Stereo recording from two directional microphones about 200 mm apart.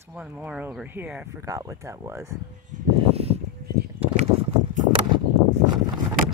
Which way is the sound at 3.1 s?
30° right (ahead or behind).